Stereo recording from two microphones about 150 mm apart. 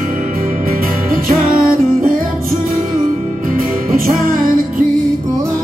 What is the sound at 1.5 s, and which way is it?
Music, 70° right (ahead or behind).